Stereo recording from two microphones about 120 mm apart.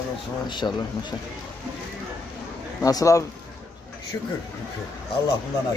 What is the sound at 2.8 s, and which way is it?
Speech, 30° left (ahead or behind).